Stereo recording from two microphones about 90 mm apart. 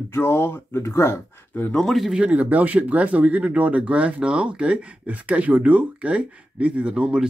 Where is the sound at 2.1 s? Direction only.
15° right (ahead or behind).